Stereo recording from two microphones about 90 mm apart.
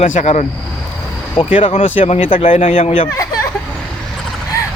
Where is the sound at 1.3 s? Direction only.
85° left.